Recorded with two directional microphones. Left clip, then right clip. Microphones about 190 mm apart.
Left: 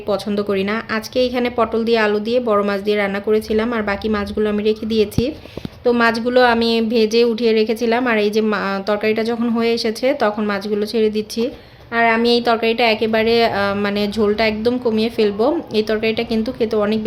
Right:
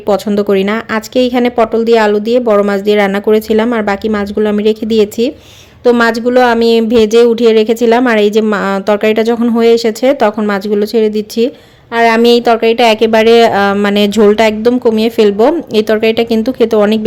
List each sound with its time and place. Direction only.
0.1 s speech: 40° right (ahead or behind)
6.2 s speech: 35° right (ahead or behind)
11.9 s speech: 55° right (ahead or behind)